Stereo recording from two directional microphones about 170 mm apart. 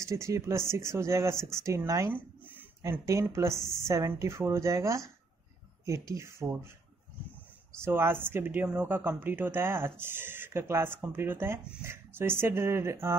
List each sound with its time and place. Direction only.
0.0 s speech: 15° right (ahead or behind)
7.8 s speech: 15° right (ahead or behind)